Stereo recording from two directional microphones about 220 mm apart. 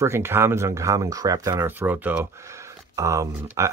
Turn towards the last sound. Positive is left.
turn(degrees=-15)  # may be behind; listen again after turning